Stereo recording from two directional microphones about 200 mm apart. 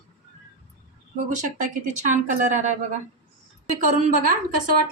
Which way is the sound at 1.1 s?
40° right (ahead or behind).